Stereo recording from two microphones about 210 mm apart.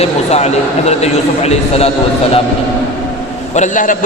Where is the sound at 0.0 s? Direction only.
30° left (ahead or behind).